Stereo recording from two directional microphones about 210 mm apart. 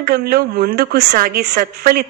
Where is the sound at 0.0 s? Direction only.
50° right (ahead or behind).